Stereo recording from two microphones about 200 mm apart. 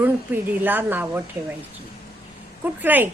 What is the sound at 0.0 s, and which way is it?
A woman's voice, 10° right (ahead or behind).